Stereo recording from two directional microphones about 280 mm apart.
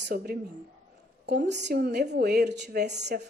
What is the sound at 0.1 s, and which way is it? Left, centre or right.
A woman's voice, right.